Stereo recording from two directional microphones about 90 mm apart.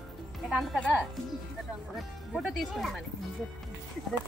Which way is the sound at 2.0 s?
Centre (ahead or behind).